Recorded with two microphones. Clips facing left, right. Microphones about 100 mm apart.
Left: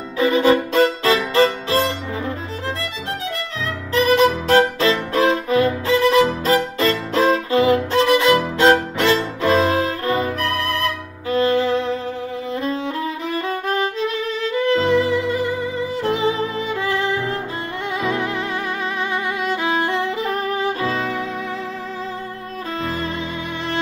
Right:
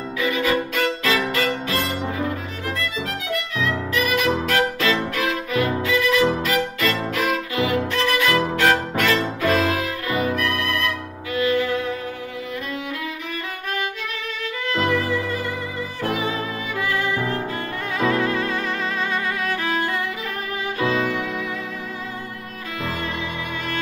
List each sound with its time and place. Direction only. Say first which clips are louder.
0.2 s violin: left 7 dB; 30° left (ahead or behind)
3.6 s music: left 6 dB; 30° left (ahead or behind)
5.1 s violin: left 6 dB; 30° left (ahead or behind)
13.3 s violin: left 7 dB; 30° left (ahead or behind)
18.0 s music: right 3 dB; 20° left (ahead or behind)
19.4 s violin: left 3 dB; 20° left (ahead or behind)